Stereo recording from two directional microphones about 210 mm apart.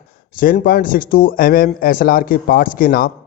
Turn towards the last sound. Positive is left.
turn(degrees=45)  # may be behind; listen again after turning